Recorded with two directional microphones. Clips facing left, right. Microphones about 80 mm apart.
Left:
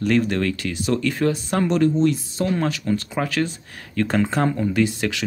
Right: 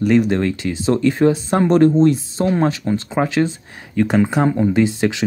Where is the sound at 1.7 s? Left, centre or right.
Right.